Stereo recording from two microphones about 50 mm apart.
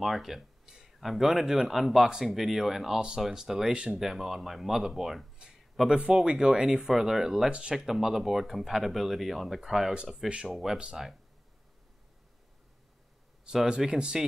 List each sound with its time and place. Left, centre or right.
0.0 s speech: centre
3.7 s speech: centre
4.0 s speech: centre
13.5 s speech: centre